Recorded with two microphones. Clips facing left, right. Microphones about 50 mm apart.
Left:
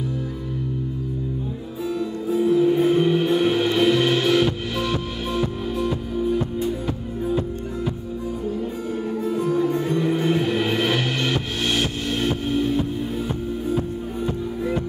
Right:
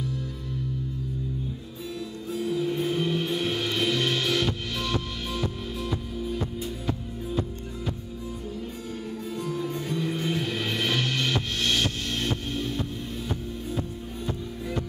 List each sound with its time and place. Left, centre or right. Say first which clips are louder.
2.0 s music: left 10 dB; centre
9.2 s music: left 10 dB; centre